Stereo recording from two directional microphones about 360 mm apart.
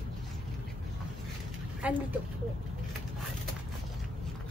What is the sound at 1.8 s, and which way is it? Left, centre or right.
Speech, centre.